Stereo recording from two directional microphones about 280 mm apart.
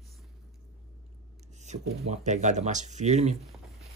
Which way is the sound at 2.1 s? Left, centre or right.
Right.